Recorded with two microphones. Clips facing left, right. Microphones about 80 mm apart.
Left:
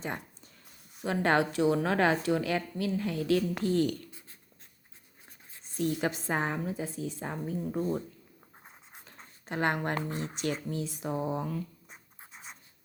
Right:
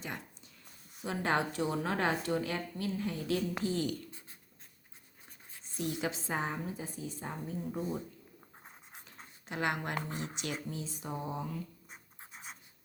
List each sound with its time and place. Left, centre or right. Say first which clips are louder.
0.0 s a sound: left 5 dB; left
1.0 s speech: left 5 dB; left
3.6 s speech: left 6 dB; left
5.7 s a woman's voice: left 5 dB; left
8.6 s a sound: left 1 dB; centre
9.5 s a woman's voice: left 5 dB; left
12.3 s scratch: even; centre